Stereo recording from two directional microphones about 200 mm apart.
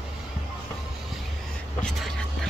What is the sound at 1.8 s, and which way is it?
Vehicle, centre (ahead or behind).